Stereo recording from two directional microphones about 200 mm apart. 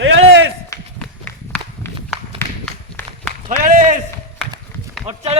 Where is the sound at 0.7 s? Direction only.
10° left (ahead or behind).